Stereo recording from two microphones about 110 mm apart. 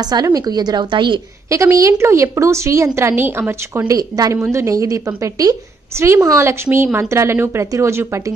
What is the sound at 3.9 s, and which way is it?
A woman's voice, 35° right (ahead or behind).